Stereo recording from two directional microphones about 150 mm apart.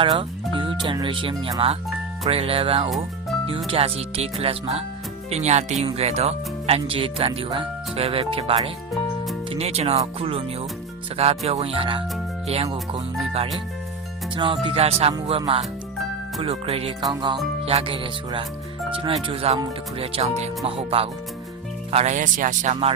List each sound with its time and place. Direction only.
0.0 s speech: 35° right (ahead or behind)
17.0 s music: 30° right (ahead or behind)
17.7 s speech: 40° right (ahead or behind)